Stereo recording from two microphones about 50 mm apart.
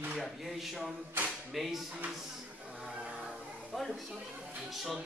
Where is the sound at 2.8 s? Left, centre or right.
Right.